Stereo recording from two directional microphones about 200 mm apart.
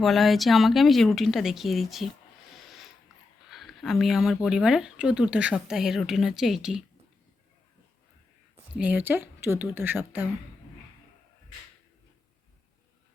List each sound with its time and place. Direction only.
0.0 s speech: centre (ahead or behind)
2.6 s a sound: centre (ahead or behind)
3.5 s speech: centre (ahead or behind)
8.8 s a woman's voice: 10° right (ahead or behind)